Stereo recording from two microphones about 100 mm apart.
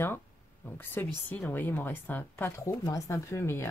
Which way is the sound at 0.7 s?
20° left (ahead or behind).